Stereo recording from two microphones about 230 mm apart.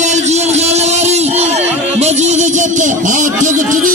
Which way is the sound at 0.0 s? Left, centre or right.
Right.